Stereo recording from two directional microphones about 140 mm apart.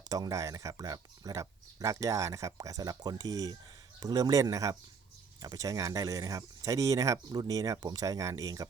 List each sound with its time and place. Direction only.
0.1 s speech: 25° right (ahead or behind)